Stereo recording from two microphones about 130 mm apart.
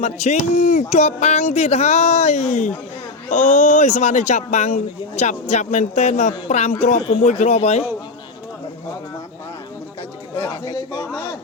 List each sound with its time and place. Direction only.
0.0 s speech: 60° left (ahead or behind)
10.3 s chatter: 45° left (ahead or behind)
10.7 s a sound: 30° left (ahead or behind)